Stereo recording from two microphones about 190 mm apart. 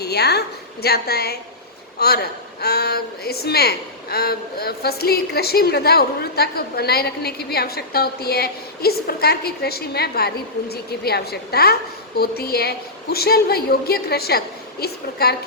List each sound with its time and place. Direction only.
0.0 s a woman's voice: 60° left (ahead or behind)